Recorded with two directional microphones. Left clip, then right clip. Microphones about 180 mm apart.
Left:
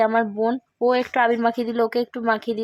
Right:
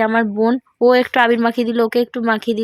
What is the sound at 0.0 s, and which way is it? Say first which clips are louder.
Speech: right 3 dB; 15° right (ahead or behind).